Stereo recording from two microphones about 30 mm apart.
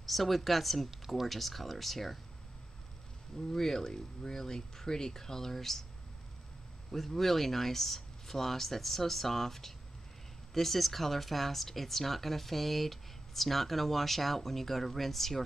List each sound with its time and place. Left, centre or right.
0.0 s speech: centre
3.3 s speech: centre
6.9 s speech: centre